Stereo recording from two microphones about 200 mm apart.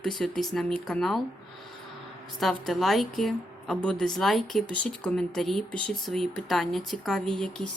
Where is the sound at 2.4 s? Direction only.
Centre (ahead or behind).